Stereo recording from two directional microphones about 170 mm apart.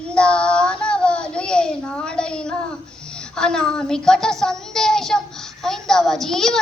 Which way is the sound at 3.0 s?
5° left (ahead or behind).